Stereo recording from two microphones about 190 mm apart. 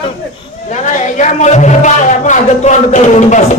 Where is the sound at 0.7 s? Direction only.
40° left (ahead or behind).